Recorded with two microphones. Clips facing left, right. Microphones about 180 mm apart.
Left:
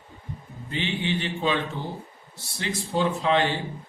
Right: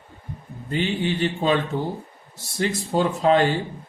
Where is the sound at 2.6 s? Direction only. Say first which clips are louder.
Right 4 dB; 45° right (ahead or behind).